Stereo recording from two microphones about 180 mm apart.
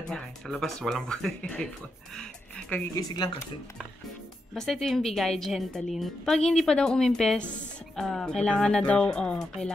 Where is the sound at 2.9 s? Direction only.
20° left (ahead or behind).